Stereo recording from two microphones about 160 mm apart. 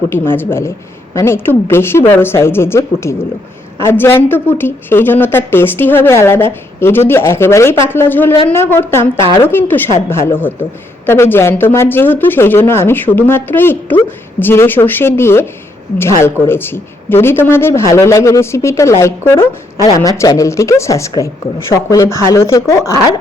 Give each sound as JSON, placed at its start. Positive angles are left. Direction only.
{"t": 0.1, "sound": "a woman's voice", "side_deg": 15}
{"t": 16.5, "sound": "a woman's voice", "side_deg": 15}